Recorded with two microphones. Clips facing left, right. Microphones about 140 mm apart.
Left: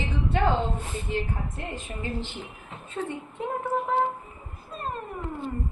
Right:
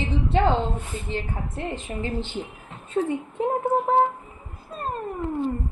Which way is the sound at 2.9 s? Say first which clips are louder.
Right 8 dB; 40° right (ahead or behind).